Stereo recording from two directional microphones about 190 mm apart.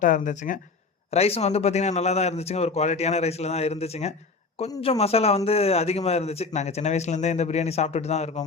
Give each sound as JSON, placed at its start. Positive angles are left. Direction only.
{"t": 0.0, "sound": "speech", "side_deg": 45}